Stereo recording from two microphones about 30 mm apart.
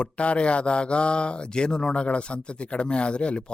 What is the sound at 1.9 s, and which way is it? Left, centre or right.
Speech, left.